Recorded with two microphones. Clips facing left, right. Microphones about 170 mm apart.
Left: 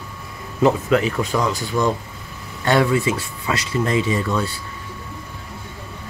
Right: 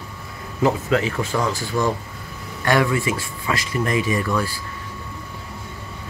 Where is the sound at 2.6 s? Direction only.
20° left (ahead or behind).